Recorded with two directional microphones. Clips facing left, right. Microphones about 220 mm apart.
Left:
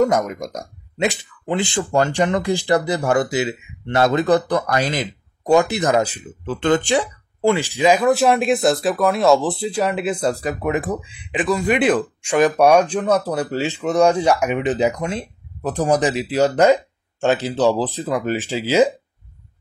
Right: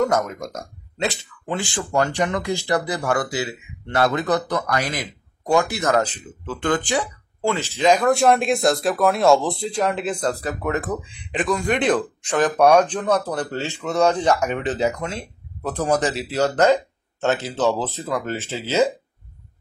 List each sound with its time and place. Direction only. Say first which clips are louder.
0.0 s speech: left 3 dB; 15° left (ahead or behind)
7.5 s speech: right 2 dB; 15° left (ahead or behind)